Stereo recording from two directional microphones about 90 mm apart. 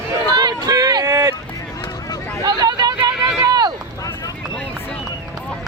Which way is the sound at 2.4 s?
50° right (ahead or behind).